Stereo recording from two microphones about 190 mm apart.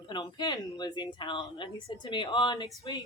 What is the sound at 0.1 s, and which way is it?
Speech, 20° left (ahead or behind).